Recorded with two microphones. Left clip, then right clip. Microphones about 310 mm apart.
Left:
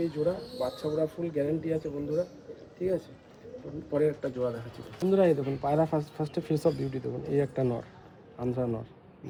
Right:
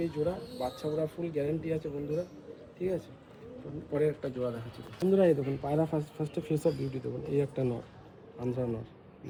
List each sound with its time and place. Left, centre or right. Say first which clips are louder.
0.0 s speech: left 3 dB; centre
5.3 s speech: left 2 dB; centre
6.4 s speech: left 2 dB; centre
6.7 s speech: left 3 dB; left
8.4 s speech: left 3 dB; centre